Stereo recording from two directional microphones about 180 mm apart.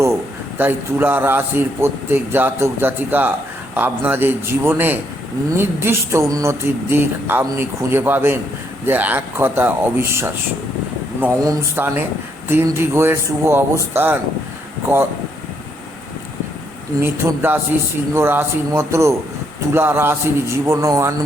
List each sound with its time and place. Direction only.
0.6 s speech: 10° right (ahead or behind)
17.0 s speech: 10° right (ahead or behind)